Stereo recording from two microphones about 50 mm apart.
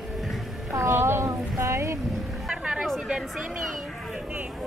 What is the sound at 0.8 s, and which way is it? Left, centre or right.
Speech, right.